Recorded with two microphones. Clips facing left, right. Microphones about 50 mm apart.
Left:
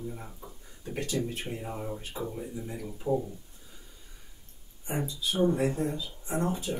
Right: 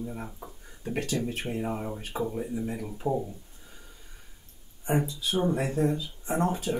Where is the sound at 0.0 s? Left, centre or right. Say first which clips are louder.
Right 3 dB; right.